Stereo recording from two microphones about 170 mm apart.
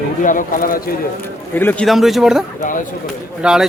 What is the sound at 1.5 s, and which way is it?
Speech, 10° left (ahead or behind).